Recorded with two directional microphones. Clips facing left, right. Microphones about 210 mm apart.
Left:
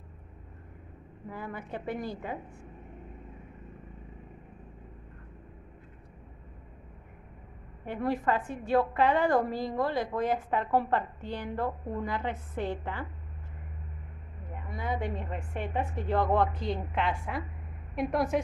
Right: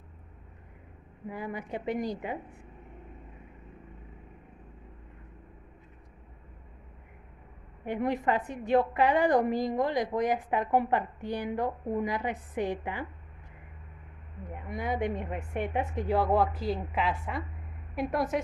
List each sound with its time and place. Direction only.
1.3 s a woman's voice: 15° right (ahead or behind)
7.8 s a woman's voice: 15° right (ahead or behind)
14.7 s a woman's voice: 15° right (ahead or behind); by 18.4 s centre (ahead or behind)